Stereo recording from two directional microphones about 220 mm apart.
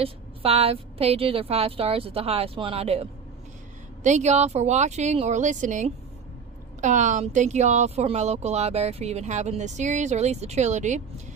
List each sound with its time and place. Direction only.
0.0 s a woman's voice: 25° right (ahead or behind)